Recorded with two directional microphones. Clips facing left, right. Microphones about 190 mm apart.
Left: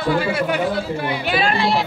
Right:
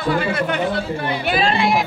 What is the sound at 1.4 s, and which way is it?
Speech, 25° right (ahead or behind).